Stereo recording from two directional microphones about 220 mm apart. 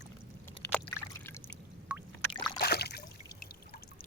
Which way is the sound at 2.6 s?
45° left (ahead or behind).